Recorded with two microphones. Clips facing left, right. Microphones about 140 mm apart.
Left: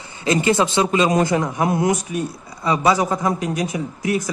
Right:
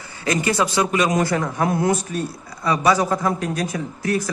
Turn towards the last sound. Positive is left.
turn(degrees=20)  # may be behind; listen again after turning